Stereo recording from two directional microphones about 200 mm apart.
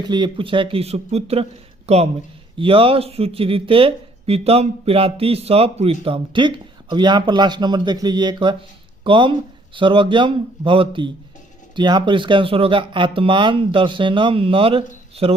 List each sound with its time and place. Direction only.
0.0 s speech: 20° right (ahead or behind)